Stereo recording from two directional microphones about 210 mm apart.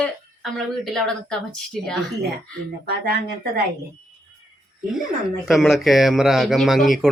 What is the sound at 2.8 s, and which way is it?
Speech, 45° right (ahead or behind).